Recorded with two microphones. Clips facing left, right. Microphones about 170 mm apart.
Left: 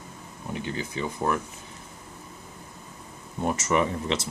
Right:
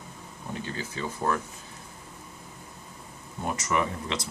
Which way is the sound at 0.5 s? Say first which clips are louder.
Left 3 dB; 20° left (ahead or behind).